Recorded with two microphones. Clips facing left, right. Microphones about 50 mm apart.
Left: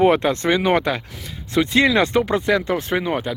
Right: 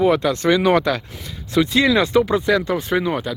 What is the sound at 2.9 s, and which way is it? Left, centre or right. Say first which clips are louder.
Speech: right 3 dB; left.